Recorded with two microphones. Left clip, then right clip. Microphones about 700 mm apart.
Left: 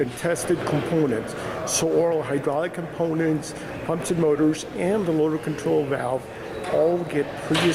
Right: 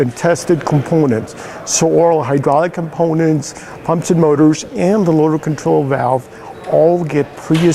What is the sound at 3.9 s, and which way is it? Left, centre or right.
Speech, right.